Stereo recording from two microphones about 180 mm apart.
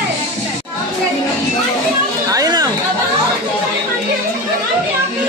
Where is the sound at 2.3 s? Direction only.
20° right (ahead or behind).